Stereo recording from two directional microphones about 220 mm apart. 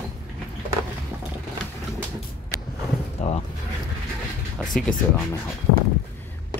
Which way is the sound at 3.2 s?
30° left (ahead or behind).